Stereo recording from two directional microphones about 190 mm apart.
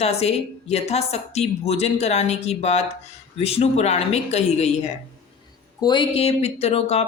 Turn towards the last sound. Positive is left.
turn(degrees=30)  # may be behind; listen again after turning